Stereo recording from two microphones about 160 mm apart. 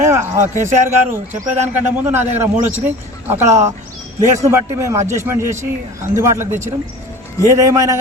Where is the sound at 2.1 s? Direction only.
15° right (ahead or behind).